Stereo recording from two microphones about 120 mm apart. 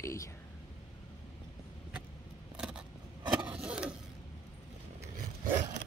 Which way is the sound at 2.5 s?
5° right (ahead or behind).